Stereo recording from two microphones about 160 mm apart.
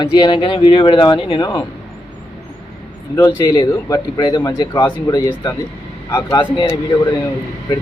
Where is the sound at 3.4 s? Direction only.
25° left (ahead or behind).